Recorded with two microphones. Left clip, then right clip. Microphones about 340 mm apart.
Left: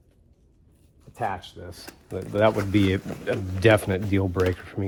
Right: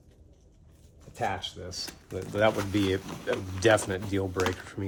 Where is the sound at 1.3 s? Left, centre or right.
Centre.